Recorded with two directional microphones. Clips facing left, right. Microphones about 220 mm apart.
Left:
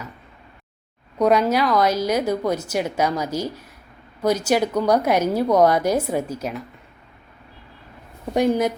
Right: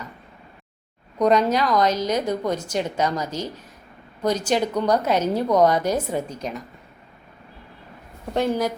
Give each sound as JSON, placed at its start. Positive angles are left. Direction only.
{"t": 1.2, "sound": "a woman's voice", "side_deg": 10}
{"t": 8.3, "sound": "a woman's voice", "side_deg": 15}